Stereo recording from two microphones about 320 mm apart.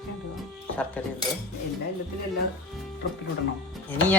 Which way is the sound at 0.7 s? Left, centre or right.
Centre.